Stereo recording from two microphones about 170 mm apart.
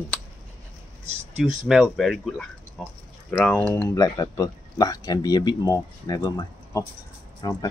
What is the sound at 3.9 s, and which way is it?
Speech, 20° left (ahead or behind).